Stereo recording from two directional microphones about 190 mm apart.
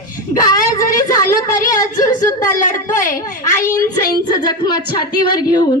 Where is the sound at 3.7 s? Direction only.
20° left (ahead or behind).